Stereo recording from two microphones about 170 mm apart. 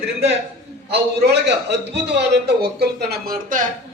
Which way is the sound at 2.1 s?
75° right (ahead or behind).